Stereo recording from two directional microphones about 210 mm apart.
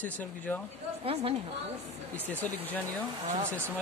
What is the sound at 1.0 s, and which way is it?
Speech, 25° right (ahead or behind).